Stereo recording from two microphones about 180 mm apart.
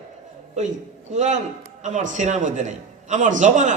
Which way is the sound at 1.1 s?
40° right (ahead or behind).